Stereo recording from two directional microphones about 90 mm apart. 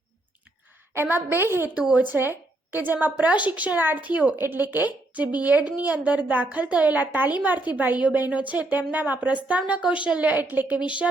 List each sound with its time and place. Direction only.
0.9 s a woman's voice: 25° right (ahead or behind)